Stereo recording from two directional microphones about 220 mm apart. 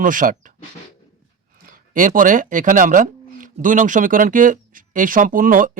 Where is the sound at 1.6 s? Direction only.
40° right (ahead or behind).